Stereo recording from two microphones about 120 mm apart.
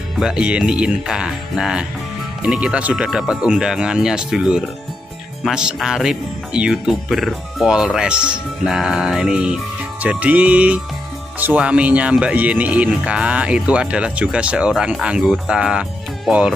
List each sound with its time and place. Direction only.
0.2 s speech: 5° right (ahead or behind)